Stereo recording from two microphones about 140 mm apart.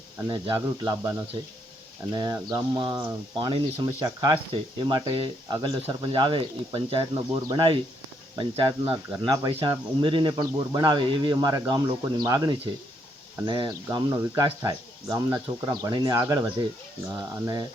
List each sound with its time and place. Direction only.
0.3 s speech: 30° right (ahead or behind)
9.1 s speech: 30° right (ahead or behind)
9.5 s speech: 40° right (ahead or behind)